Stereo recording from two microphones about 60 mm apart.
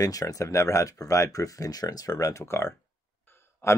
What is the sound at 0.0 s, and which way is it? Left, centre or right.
Speech, left.